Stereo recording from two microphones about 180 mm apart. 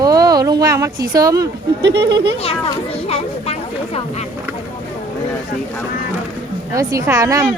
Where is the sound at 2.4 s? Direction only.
35° left (ahead or behind).